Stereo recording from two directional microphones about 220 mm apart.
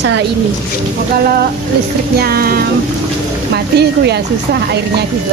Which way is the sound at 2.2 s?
45° right (ahead or behind).